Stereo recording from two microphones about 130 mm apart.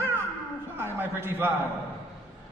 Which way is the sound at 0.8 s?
15° right (ahead or behind).